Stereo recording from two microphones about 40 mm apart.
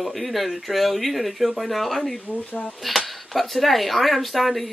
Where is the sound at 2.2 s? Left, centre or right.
Left.